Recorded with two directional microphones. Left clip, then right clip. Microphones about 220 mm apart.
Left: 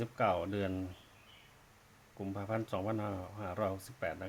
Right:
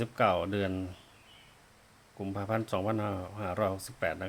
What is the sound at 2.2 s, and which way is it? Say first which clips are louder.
Speech: right 5 dB; 10° right (ahead or behind).